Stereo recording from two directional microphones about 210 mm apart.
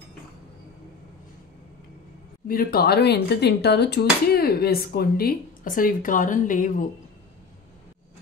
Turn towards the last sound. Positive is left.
turn(degrees=40)  # may be behind; listen again after turning